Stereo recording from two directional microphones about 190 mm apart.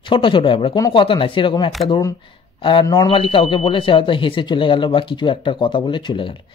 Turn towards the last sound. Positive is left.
turn(degrees=25)  # may be behind; listen again after turning